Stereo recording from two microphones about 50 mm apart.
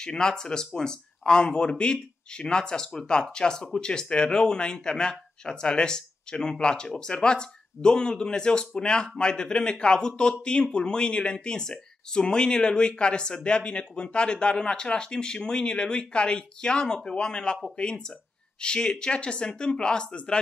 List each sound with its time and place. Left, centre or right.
0.0 s speech: centre